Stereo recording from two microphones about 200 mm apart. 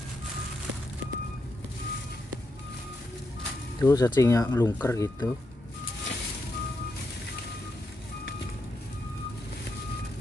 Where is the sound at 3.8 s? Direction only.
15° left (ahead or behind).